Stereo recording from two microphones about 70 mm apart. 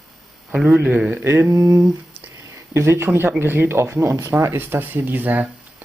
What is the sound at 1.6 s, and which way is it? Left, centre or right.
Speech, right.